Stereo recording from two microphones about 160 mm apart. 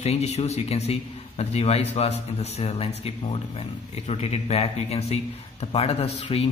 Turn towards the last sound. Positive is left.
turn(degrees=40)  # may be behind; listen again after turning